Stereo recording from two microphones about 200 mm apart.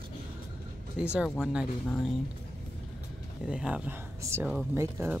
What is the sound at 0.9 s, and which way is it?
Speech, 5° right (ahead or behind).